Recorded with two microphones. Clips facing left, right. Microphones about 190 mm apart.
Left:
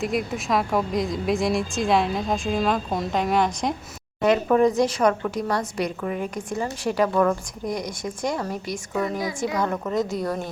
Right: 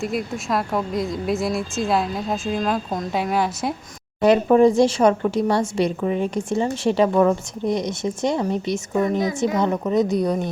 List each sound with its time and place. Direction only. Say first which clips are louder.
0.0 s a woman's voice: even; centre (ahead or behind)
4.2 s a woman's voice: right 4 dB; 30° right (ahead or behind)